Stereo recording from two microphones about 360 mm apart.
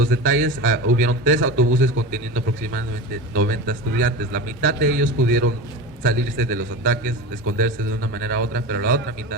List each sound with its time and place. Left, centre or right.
0.0 s a man's voice: right